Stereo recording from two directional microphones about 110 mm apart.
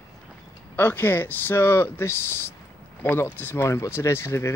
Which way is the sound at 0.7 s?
20° left (ahead or behind).